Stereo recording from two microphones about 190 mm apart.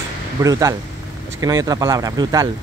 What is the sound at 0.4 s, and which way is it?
Speech, 15° right (ahead or behind).